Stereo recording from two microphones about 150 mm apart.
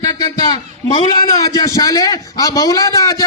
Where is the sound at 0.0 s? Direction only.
25° left (ahead or behind).